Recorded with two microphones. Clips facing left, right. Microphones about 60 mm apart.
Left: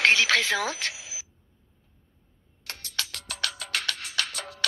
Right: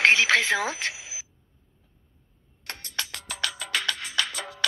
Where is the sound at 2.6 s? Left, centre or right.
Right.